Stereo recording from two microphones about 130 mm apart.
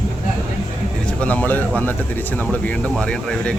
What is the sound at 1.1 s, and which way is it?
A man's voice, 10° left (ahead or behind).